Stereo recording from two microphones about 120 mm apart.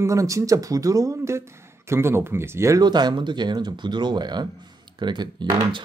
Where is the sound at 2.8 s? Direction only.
35° right (ahead or behind).